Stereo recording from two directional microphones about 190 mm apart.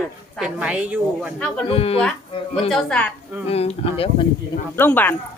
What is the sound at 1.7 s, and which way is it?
Speech, 30° left (ahead or behind).